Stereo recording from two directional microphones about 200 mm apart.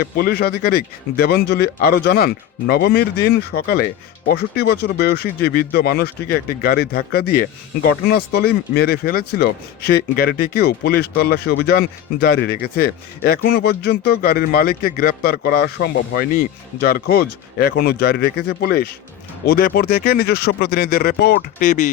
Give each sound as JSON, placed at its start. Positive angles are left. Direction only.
{"t": 0.0, "sound": "speech", "side_deg": 50}